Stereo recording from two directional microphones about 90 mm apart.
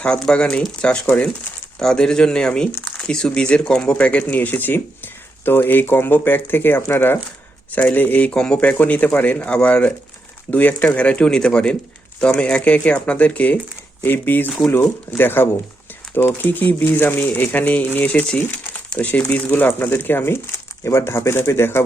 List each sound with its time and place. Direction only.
0.0 s speech: 10° left (ahead or behind); by 21.8 s 30° left (ahead or behind)